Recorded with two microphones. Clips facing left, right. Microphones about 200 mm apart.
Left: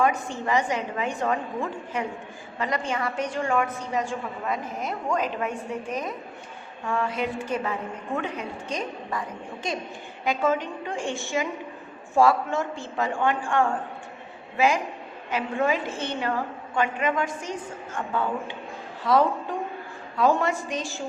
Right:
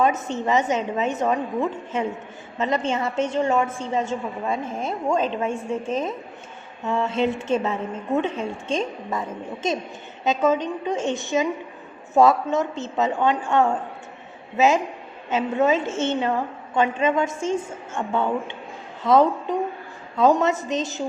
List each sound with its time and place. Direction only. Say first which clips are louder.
0.0 s a woman's voice: right 3 dB; 20° right (ahead or behind)